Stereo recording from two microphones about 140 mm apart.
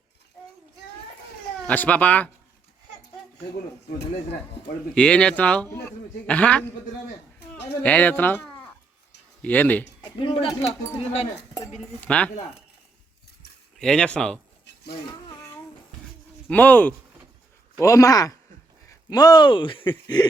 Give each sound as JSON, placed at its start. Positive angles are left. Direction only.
{"t": 1.6, "sound": "a man's voice", "side_deg": 10}
{"t": 4.9, "sound": "a man's voice", "side_deg": 10}
{"t": 10.0, "sound": "speech", "side_deg": 35}
{"t": 11.9, "sound": "a man's voice", "side_deg": 10}
{"t": 13.7, "sound": "speech", "side_deg": 5}
{"t": 16.5, "sound": "a man's voice", "side_deg": 10}
{"t": 17.7, "sound": "speech", "side_deg": 25}